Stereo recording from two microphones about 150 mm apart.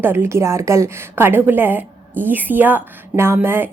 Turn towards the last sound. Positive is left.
turn(degrees=-15)  # may be behind; listen again after turning